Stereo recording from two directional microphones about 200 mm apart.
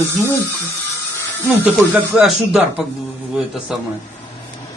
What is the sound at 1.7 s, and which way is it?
A man's voice, 5° right (ahead or behind).